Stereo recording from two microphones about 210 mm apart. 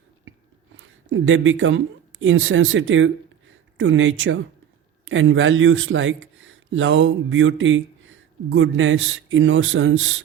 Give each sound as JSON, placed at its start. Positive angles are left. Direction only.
{"t": 0.8, "sound": "speech", "side_deg": -65}